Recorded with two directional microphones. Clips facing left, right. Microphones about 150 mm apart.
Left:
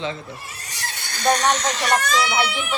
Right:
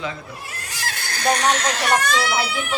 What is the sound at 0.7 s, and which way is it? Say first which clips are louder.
Neigh: right 4 dB; 90° right.